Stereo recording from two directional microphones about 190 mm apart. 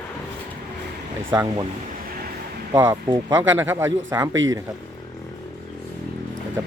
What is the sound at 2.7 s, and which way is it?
Speech, 15° right (ahead or behind).